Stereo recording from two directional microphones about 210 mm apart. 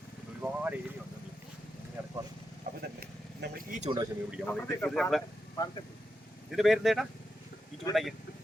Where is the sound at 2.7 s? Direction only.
40° right (ahead or behind).